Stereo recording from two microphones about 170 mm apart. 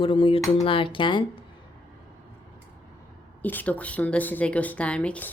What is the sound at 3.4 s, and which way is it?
A woman's voice, 10° left (ahead or behind).